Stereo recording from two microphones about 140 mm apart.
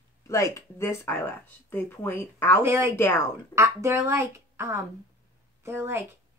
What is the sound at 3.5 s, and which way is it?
A woman's voice, 20° right (ahead or behind).